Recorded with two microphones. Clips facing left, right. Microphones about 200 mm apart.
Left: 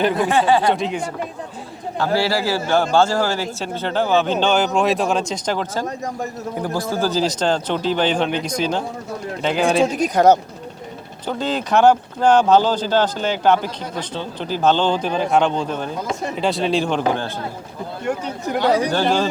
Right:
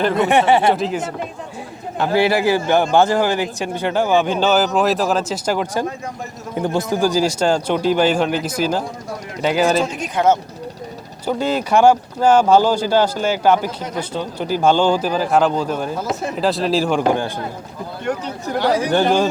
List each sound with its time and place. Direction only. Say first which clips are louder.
0.2 s speech: right 2 dB; 25° right (ahead or behind)
0.7 s speech: right 2 dB; centre (ahead or behind)
2.0 s speech: right 3 dB; 20° right (ahead or behind)
6.6 s speech: right 4 dB; 25° right (ahead or behind); by 9.8 s 5° right (ahead or behind)
9.8 s speech: left 3 dB; 40° left (ahead or behind)
11.3 s speech: right 3 dB; 10° right (ahead or behind)
18.9 s speech: right 3 dB; 20° right (ahead or behind)